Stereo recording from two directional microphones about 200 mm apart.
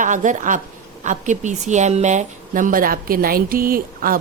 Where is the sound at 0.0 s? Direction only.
40° right (ahead or behind).